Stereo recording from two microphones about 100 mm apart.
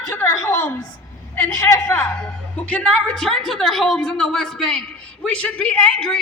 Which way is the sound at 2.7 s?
10° left (ahead or behind).